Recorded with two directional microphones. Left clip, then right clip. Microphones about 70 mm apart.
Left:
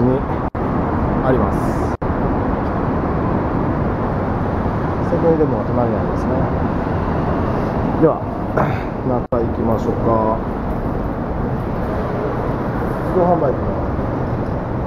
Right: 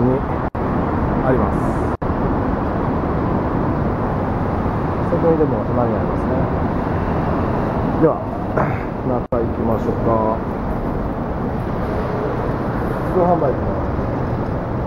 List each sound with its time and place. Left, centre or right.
8.0 s speech: centre